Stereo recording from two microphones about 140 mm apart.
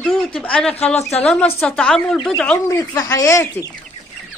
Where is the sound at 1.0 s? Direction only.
50° left (ahead or behind).